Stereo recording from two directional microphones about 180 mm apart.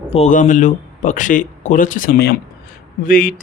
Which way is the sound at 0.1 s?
40° left (ahead or behind).